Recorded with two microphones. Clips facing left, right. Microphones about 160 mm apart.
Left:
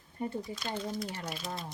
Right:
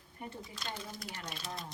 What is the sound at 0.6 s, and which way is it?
Speech, centre (ahead or behind).